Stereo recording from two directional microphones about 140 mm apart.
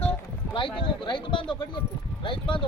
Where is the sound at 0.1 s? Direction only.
35° left (ahead or behind).